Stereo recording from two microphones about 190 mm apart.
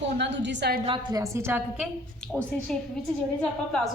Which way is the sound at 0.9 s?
15° right (ahead or behind).